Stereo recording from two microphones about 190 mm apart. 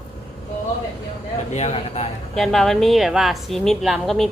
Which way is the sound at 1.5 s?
35° left (ahead or behind).